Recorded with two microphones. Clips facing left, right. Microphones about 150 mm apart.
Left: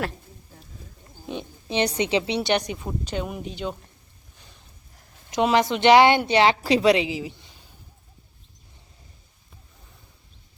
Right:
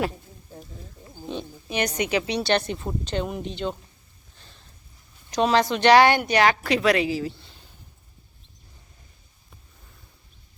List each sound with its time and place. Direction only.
1.7 s a woman's voice: 30° left (ahead or behind); by 3.8 s 5° left (ahead or behind)
4.4 s a sound: 15° left (ahead or behind)
5.3 s a woman's voice: 20° left (ahead or behind)